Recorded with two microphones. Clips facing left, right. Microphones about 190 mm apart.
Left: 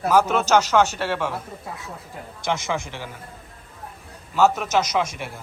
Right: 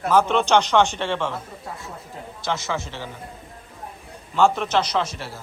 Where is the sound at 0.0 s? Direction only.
10° left (ahead or behind).